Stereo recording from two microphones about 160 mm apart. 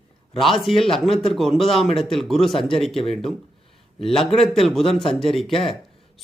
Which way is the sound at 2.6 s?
35° left (ahead or behind).